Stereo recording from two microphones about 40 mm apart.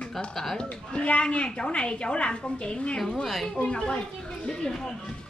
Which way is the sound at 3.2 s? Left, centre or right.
Centre.